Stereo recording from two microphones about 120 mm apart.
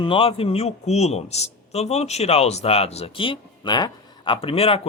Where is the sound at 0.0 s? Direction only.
50° left (ahead or behind).